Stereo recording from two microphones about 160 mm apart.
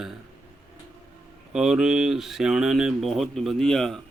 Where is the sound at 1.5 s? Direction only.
5° right (ahead or behind).